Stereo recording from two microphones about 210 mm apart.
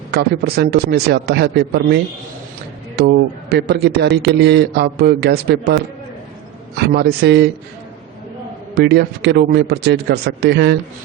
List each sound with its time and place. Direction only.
0.1 s a man's voice: 50° right (ahead or behind)
6.7 s a man's voice: 50° right (ahead or behind)
8.7 s a man's voice: 50° right (ahead or behind)